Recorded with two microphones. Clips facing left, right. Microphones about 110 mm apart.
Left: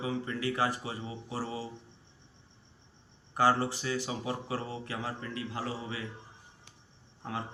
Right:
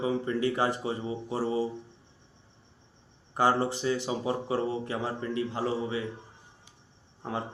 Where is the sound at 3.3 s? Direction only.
20° right (ahead or behind).